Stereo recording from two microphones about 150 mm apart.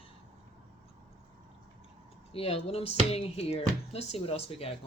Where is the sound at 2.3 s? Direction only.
40° left (ahead or behind).